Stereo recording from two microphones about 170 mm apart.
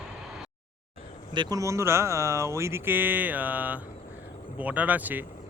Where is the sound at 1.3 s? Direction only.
25° right (ahead or behind).